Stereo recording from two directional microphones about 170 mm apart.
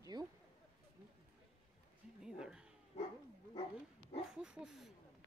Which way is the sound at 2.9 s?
35° left (ahead or behind).